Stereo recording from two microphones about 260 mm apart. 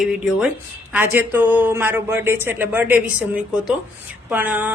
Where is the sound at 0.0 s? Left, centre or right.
Centre.